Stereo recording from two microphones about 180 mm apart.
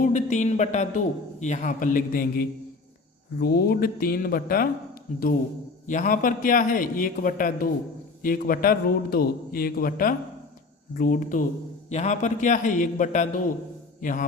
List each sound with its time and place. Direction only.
0.0 s a man's voice: 45° left (ahead or behind)
5.9 s a man's voice: 50° left (ahead or behind)